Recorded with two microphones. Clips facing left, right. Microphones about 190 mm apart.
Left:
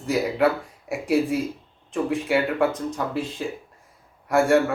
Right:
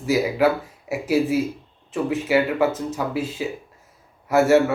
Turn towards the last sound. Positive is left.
turn(degrees=-5)  # may be behind; listen again after turning